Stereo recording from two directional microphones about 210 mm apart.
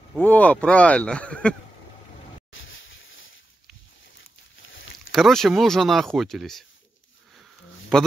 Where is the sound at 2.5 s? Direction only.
65° left (ahead or behind).